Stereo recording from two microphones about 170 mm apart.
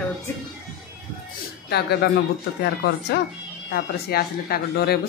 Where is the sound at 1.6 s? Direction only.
70° left (ahead or behind).